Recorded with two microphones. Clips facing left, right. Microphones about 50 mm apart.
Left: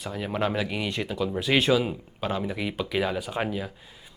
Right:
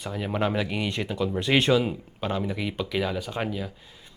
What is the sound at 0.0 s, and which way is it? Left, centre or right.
Speech, centre.